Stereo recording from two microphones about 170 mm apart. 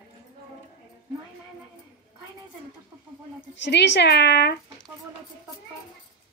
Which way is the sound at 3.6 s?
90° left.